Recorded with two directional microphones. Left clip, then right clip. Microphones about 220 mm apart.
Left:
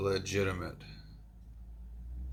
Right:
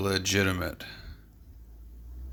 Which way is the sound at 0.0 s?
60° right (ahead or behind).